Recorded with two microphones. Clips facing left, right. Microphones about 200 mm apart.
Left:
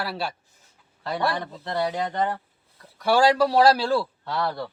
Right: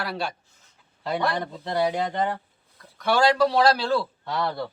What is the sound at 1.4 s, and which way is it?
Speech, 15° right (ahead or behind).